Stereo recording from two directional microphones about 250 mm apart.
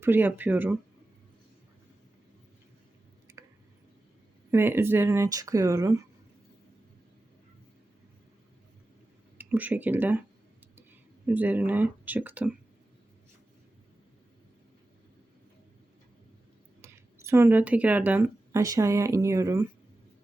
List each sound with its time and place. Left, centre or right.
0.0 s speech: centre
4.5 s speech: centre
9.4 s speech: centre
11.3 s speech: centre
16.8 s speech: centre